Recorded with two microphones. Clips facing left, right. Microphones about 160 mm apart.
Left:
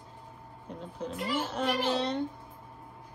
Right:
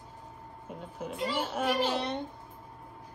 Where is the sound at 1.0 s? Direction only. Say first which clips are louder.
Even; 5° right (ahead or behind).